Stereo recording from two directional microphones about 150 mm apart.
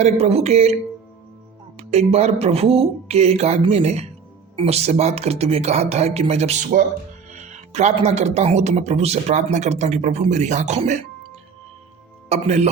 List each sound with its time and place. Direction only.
0.0 s speech: 45° right (ahead or behind)
1.8 s speech: 45° right (ahead or behind)
12.3 s speech: 45° right (ahead or behind)